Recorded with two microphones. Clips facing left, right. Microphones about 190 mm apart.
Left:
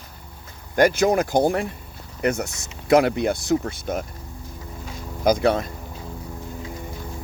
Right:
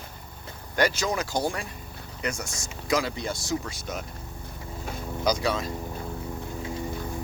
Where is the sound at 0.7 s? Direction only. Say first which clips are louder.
Left 8 dB; 55° left (ahead or behind).